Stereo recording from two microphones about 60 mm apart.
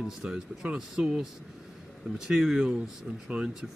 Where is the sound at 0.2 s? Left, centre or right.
Centre.